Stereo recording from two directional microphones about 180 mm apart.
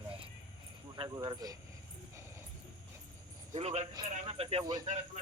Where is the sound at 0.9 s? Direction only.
25° right (ahead or behind).